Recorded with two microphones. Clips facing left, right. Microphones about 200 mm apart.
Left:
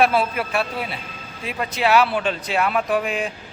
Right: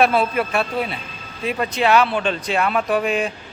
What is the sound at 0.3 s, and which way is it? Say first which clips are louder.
Speech: right 3 dB; 5° left (ahead or behind).